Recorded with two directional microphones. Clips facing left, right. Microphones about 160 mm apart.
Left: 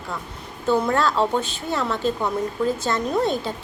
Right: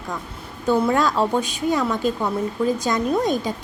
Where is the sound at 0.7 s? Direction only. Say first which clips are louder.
Right 1 dB; 10° right (ahead or behind).